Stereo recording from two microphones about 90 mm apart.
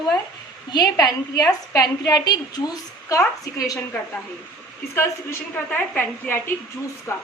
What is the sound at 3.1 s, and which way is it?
Speech, 35° left (ahead or behind).